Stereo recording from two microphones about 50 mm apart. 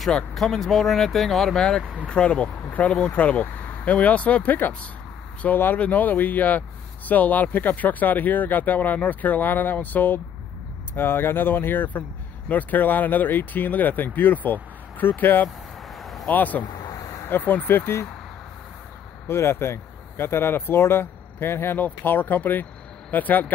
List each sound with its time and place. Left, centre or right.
0.3 s speech: centre
1.6 s speech: centre; by 15.4 s left
16.0 s a sound: centre
16.3 s speech: left
19.2 s speech: left
21.7 s speech: left